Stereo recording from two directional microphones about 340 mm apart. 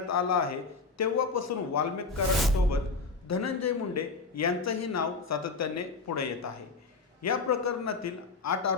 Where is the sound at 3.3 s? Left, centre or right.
Left.